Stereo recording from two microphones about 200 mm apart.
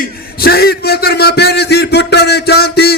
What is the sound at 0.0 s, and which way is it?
A man's voice, 50° left (ahead or behind).